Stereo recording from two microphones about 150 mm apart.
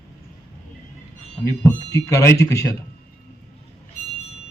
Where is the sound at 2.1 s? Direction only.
20° left (ahead or behind).